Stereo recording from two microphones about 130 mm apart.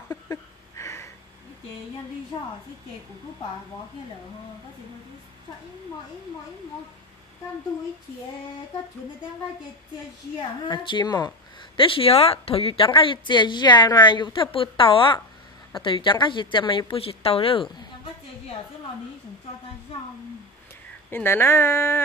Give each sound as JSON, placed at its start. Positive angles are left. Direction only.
{"t": 0.1, "sound": "a sound", "side_deg": 25}
{"t": 10.7, "sound": "speech", "side_deg": 35}
{"t": 21.1, "sound": "speech", "side_deg": 15}